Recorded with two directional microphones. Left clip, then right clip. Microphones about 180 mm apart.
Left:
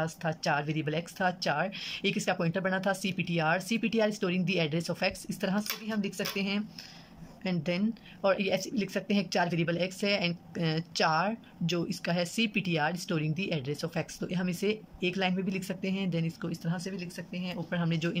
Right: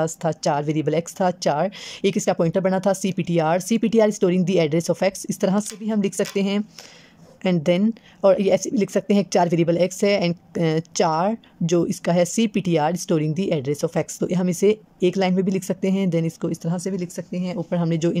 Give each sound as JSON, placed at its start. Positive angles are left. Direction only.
{"t": 0.0, "sound": "speech", "side_deg": -35}